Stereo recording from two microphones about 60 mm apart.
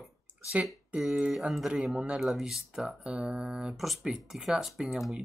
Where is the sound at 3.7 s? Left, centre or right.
Centre.